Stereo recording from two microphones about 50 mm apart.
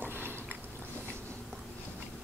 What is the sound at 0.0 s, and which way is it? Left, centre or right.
Biting, right.